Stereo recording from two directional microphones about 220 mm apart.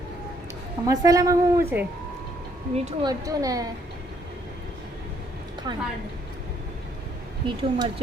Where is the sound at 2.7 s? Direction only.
30° right (ahead or behind).